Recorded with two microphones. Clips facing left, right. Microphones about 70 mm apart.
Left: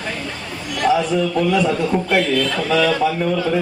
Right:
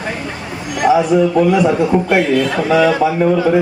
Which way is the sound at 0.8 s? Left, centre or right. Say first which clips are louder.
Right 5 dB; centre.